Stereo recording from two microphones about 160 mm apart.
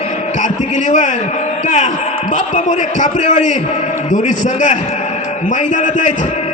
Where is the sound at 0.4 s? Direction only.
50° left (ahead or behind).